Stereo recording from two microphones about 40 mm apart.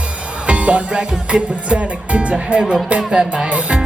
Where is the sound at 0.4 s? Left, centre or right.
Right.